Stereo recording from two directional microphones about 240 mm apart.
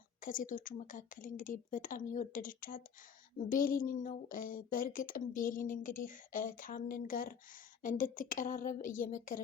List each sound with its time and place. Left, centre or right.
0.2 s speech: left